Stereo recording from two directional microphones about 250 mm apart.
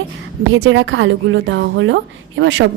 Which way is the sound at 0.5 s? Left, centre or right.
Right.